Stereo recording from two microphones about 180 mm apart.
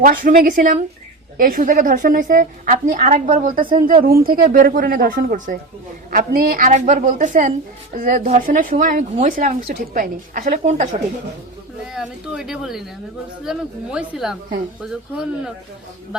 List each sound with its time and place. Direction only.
0.0 s speech: 50° right (ahead or behind)
11.9 s a woman's voice: centre (ahead or behind)